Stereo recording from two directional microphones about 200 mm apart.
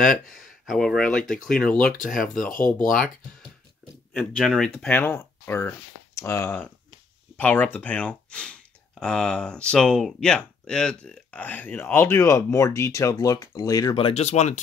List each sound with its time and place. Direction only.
0.4 s speech: centre (ahead or behind)
2.8 s speech: 45° left (ahead or behind)
4.1 s speech: centre (ahead or behind); by 14.6 s 35° left (ahead or behind)